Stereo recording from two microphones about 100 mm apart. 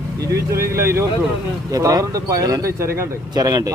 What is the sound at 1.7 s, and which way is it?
Speech, 35° right (ahead or behind).